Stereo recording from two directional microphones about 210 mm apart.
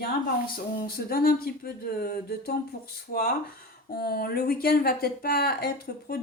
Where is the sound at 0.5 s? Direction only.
45° left (ahead or behind).